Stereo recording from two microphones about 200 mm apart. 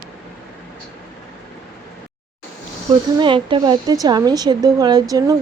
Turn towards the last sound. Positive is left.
turn(degrees=-20)  # may be behind; listen again after turning